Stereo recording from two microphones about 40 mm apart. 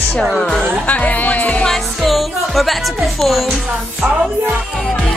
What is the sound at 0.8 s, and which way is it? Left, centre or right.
Speech, left.